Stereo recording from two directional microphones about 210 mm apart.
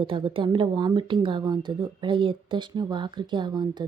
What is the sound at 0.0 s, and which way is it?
A woman's voice, 25° right (ahead or behind).